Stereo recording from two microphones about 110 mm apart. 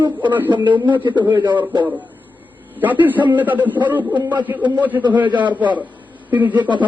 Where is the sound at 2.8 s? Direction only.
15° right (ahead or behind).